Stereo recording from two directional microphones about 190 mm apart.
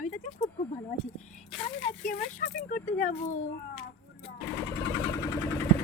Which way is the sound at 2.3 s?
40° left (ahead or behind).